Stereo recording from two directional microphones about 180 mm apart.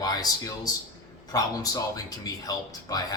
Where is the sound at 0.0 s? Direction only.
20° left (ahead or behind).